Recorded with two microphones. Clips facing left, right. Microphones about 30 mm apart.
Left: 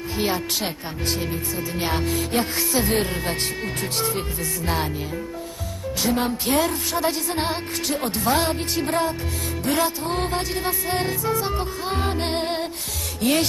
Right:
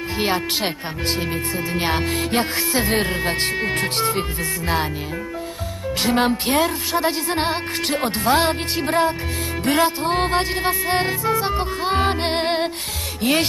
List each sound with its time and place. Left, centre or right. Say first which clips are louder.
0.2 s speech: right 3 dB; right
2.6 s speech: right 2 dB; right
6.0 s speech: right 4 dB; right
7.3 s speech: right 3 dB; right
8.0 s speech: right 4 dB; right
8.7 s speech: right 3 dB; right
9.7 s speech: right 5 dB; right
12.2 s music: right 4 dB; right
13.2 s speech: right 1 dB; right